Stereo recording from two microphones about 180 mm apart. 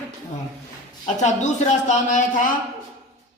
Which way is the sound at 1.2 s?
40° left (ahead or behind).